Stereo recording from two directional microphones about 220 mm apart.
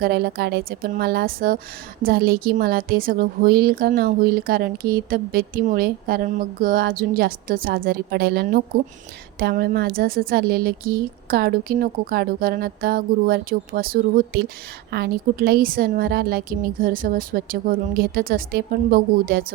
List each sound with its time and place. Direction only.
0.0 s a woman's voice: 45° right (ahead or behind)